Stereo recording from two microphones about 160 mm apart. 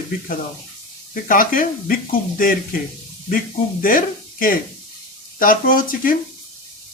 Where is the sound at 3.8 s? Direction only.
60° left (ahead or behind).